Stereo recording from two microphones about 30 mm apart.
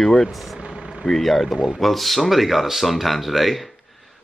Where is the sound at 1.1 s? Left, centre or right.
Centre.